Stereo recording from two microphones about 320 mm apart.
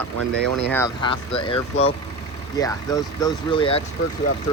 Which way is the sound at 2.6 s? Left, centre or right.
Centre.